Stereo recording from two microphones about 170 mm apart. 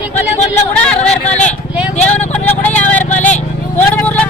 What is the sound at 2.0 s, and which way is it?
Vehicle, 10° left (ahead or behind).